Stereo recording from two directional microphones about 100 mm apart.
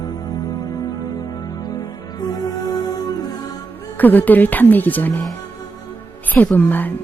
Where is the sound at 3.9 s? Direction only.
15° left (ahead or behind).